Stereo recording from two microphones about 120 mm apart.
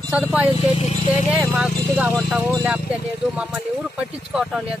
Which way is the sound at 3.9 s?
5° right (ahead or behind).